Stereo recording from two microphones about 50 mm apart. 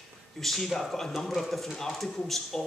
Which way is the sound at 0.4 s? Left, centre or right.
Centre.